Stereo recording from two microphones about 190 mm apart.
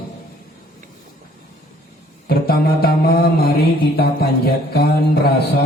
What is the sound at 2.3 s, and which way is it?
Mantra, 55° left (ahead or behind).